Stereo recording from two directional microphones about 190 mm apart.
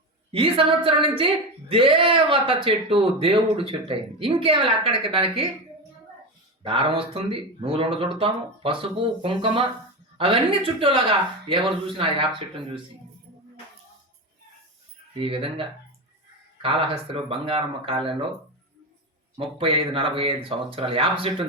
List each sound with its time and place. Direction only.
0.3 s speech: 30° right (ahead or behind)
6.6 s speech: 30° right (ahead or behind)
15.2 s speech: 30° right (ahead or behind)
19.5 s speech: 30° right (ahead or behind)